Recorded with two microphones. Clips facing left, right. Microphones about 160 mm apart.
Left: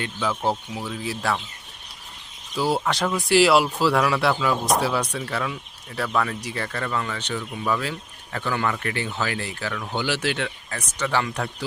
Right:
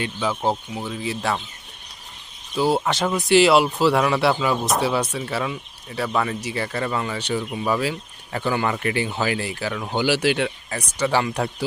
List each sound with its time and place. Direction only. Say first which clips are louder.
0.0 s speech: right 2 dB; centre (ahead or behind)
2.7 s speech: right 2 dB; centre (ahead or behind)
6.7 s speech: right 1 dB; 20° right (ahead or behind)